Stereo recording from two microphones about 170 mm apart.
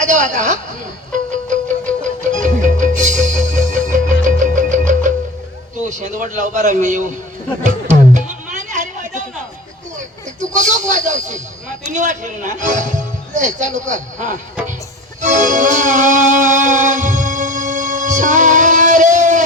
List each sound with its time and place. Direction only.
0.0 s a woman's voice: 45° right (ahead or behind)
2.4 s music: 45° right (ahead or behind)
5.9 s speech: 45° right (ahead or behind)
7.6 s music: 45° right (ahead or behind)
10.4 s speech: 45° right (ahead or behind)
15.2 s music: 45° right (ahead or behind)